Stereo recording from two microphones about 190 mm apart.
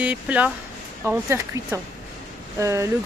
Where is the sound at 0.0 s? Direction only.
5° right (ahead or behind).